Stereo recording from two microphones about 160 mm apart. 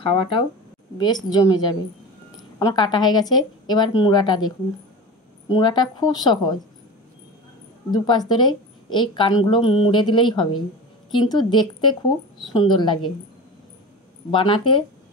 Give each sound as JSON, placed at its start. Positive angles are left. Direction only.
{"t": 0.0, "sound": "a woman's voice", "side_deg": 35}
{"t": 7.9, "sound": "a woman's voice", "side_deg": 25}
{"t": 14.3, "sound": "speech", "side_deg": 30}